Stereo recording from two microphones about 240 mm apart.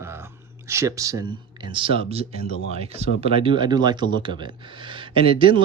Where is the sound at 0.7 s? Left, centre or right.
Centre.